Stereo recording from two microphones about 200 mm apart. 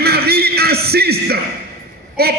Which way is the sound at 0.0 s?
50° right (ahead or behind).